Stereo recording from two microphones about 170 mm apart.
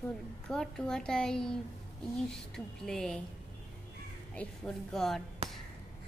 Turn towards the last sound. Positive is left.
turn(degrees=0)  # may be behind; listen again after turning